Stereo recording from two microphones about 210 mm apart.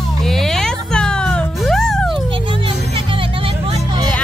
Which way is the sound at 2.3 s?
25° right (ahead or behind).